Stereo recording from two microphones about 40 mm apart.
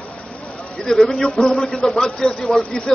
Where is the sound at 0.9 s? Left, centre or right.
Centre.